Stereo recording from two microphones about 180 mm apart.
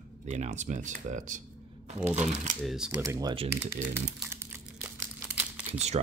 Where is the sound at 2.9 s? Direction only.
20° right (ahead or behind).